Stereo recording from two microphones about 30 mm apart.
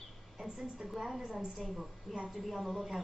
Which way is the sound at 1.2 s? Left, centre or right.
Right.